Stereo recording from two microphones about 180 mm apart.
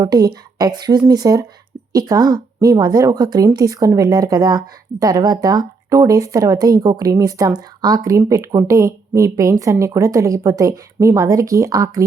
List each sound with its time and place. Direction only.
0.0 s speech: 20° right (ahead or behind)